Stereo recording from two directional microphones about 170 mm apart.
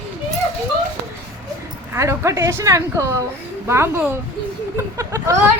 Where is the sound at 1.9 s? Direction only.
15° right (ahead or behind).